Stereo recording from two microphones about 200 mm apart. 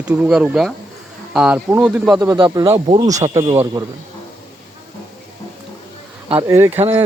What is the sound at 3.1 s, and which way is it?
Speech, 15° right (ahead or behind).